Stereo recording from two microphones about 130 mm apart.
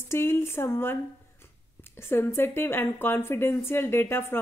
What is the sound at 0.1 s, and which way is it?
Speech, 20° left (ahead or behind).